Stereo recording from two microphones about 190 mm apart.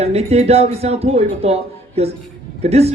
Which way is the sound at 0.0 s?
35° right (ahead or behind).